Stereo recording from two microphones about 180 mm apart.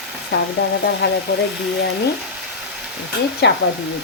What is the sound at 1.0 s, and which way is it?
Speech, 70° left (ahead or behind).